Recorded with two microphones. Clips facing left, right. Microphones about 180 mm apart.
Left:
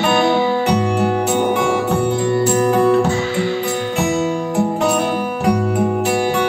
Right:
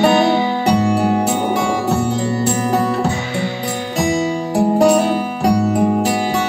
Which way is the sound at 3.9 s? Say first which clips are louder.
Right 2 dB; 35° right (ahead or behind).